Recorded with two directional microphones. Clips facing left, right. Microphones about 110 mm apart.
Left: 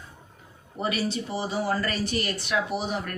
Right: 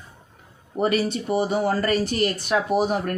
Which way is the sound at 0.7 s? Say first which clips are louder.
Right 6 dB; 50° right (ahead or behind).